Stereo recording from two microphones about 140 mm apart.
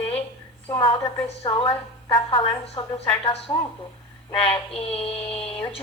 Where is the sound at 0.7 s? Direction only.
35° left (ahead or behind).